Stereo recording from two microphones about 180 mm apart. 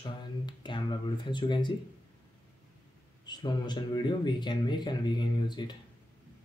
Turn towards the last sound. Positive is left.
turn(degrees=25)  # may be behind; listen again after turning